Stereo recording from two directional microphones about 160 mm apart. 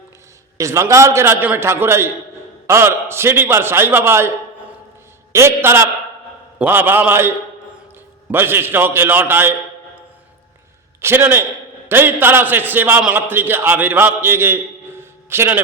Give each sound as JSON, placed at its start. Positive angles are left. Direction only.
{"t": 0.5, "sound": "a man's voice", "side_deg": -20}
{"t": 5.3, "sound": "a man's voice", "side_deg": -15}
{"t": 11.0, "sound": "a man's voice", "side_deg": -15}